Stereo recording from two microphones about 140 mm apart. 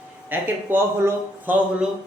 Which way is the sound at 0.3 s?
15° right (ahead or behind).